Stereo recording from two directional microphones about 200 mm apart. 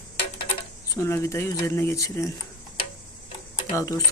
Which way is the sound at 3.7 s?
15° left (ahead or behind).